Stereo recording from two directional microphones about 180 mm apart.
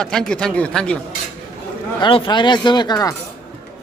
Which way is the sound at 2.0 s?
30° left (ahead or behind).